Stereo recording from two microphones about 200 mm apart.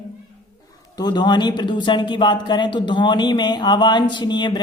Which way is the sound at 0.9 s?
20° left (ahead or behind).